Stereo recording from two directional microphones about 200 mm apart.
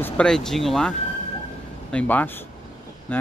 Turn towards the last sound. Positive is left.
turn(degrees=10)  # may be behind; listen again after turning